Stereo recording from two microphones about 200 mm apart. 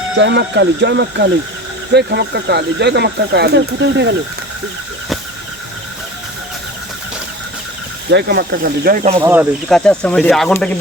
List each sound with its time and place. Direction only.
0.2 s speech: 60° right (ahead or behind)
8.1 s speech: 50° right (ahead or behind)
9.2 s speech: 10° right (ahead or behind)
9.6 s speech: 5° left (ahead or behind)